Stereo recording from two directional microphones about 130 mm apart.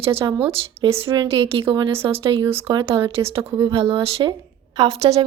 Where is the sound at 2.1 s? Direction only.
45° right (ahead or behind).